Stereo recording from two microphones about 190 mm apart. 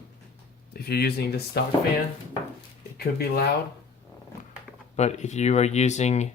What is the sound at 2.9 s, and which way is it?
Speech, 55° left (ahead or behind).